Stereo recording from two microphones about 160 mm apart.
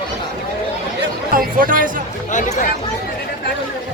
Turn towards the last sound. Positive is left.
turn(degrees=50)  # may be behind; listen again after turning